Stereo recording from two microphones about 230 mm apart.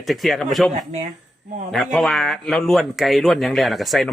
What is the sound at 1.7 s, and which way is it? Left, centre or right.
A man's voice, centre.